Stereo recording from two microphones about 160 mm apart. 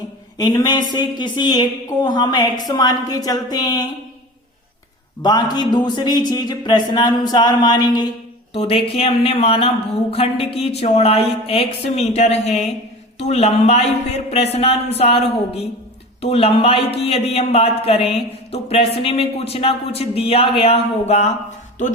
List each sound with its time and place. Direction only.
0.3 s speech: 25° left (ahead or behind)
5.2 s speech: 25° left (ahead or behind)
8.5 s speech: 35° left (ahead or behind)